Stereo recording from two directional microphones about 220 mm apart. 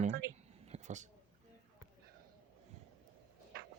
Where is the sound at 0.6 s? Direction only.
30° right (ahead or behind).